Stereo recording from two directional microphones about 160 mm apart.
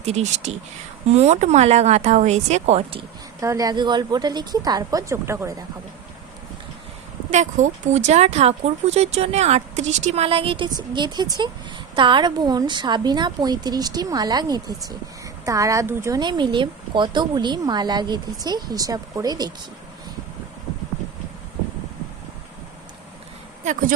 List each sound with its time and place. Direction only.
0.0 s speech: 45° right (ahead or behind)
3.4 s speech: 20° right (ahead or behind)
7.3 s speech: 50° right (ahead or behind); by 19.5 s 25° right (ahead or behind)